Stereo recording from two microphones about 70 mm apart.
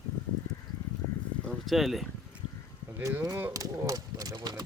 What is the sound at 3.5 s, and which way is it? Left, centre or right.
Speech, right.